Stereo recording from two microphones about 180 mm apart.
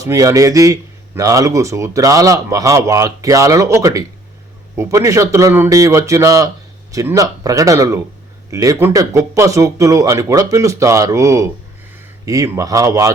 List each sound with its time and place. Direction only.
0.0 s speech: 15° right (ahead or behind)